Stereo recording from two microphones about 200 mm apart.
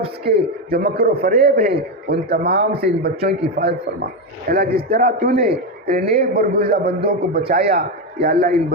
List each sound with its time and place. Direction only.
0.3 s a man's voice: 50° right (ahead or behind)